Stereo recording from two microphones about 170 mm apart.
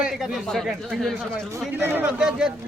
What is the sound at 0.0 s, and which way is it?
Speech, centre (ahead or behind).